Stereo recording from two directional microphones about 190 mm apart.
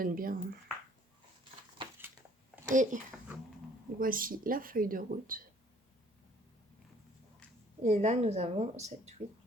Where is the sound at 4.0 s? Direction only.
45° right (ahead or behind).